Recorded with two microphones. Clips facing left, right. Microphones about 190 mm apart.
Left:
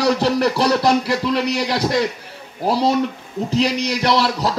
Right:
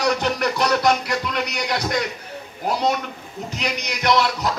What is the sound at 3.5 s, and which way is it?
Speech, 30° left (ahead or behind).